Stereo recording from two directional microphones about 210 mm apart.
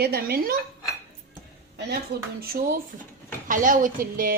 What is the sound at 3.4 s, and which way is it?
Speech, 40° right (ahead or behind).